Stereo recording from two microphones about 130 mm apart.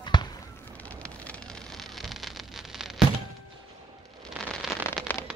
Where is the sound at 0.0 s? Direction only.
35° left (ahead or behind).